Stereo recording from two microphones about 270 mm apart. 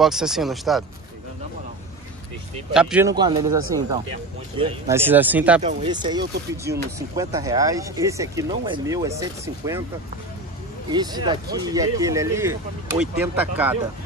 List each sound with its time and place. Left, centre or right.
0.0 s speech: centre
2.7 s speech: centre
4.9 s speech: centre
5.6 s speech: right
10.9 s speech: centre